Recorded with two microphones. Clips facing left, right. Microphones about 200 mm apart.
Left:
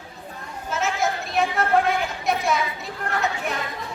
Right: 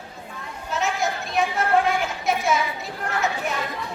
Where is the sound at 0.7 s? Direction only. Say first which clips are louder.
Left 1 dB; centre (ahead or behind).